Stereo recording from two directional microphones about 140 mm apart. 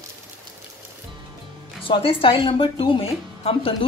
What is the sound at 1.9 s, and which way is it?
A woman's voice, 40° left (ahead or behind).